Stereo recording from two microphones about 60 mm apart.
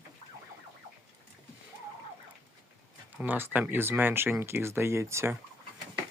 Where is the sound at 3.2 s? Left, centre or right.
Right.